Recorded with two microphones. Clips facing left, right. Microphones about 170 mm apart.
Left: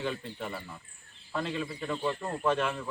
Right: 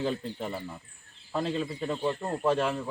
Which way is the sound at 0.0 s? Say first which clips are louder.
Right 4 dB; 30° right (ahead or behind).